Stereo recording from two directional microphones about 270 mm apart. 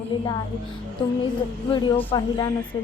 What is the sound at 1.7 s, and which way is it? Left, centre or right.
Speech, centre.